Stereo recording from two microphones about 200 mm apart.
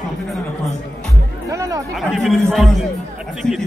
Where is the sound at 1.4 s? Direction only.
15° right (ahead or behind).